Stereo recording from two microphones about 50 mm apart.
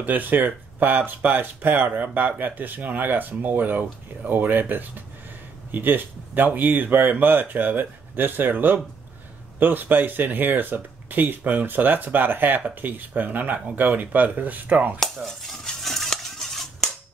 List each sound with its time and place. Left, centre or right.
0.0 s speech: right
15.0 s dishes: centre